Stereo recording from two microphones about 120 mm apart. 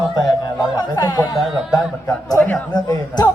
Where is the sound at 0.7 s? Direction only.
35° left (ahead or behind).